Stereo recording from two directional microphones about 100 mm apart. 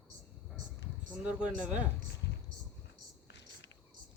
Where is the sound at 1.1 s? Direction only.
10° right (ahead or behind).